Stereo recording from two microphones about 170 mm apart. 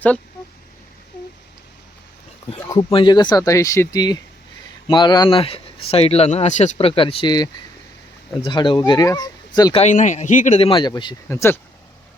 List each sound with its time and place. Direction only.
2.6 s speech: 25° left (ahead or behind)
9.7 s a man's voice: 45° left (ahead or behind)
10.6 s speech: 30° left (ahead or behind)
11.3 s speech: 15° left (ahead or behind)